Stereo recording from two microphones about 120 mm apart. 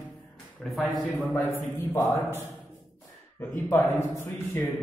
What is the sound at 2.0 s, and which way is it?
Speech, 25° left (ahead or behind).